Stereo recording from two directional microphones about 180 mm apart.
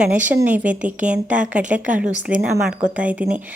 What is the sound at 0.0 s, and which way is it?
A woman's voice, 10° right (ahead or behind).